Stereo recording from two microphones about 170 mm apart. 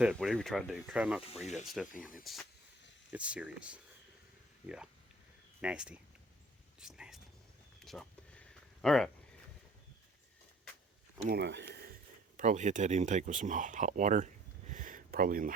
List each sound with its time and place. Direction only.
0.0 s speech: centre (ahead or behind)
5.6 s speech: 5° right (ahead or behind)
7.8 s a sound: centre (ahead or behind)
11.3 s speech: 85° right
12.4 s speech: 50° right (ahead or behind)
14.7 s a sound: 50° right (ahead or behind)